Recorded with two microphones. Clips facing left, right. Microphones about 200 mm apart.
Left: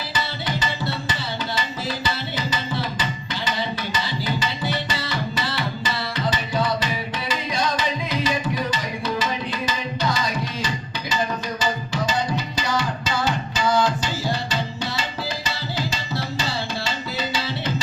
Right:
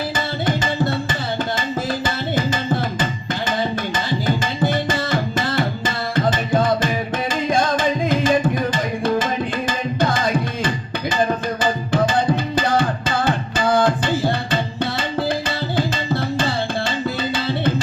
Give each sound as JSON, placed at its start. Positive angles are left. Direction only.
{"t": 0.4, "sound": "tabla", "side_deg": -50}
{"t": 2.0, "sound": "tabla", "side_deg": -50}